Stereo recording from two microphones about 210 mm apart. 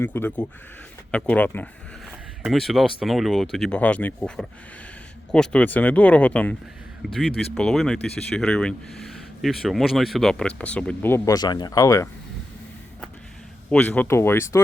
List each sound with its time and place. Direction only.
0.0 s speech: 10° left (ahead or behind)
13.7 s speech: 5° left (ahead or behind)